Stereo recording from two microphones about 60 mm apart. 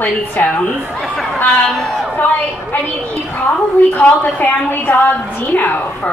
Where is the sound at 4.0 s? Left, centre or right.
Left.